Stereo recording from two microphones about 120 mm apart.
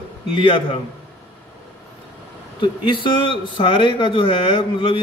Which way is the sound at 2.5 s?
45° left (ahead or behind).